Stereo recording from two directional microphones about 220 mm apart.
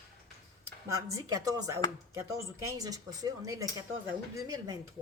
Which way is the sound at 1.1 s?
15° right (ahead or behind).